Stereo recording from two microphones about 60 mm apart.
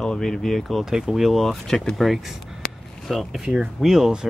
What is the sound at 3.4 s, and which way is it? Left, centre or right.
Speech, centre.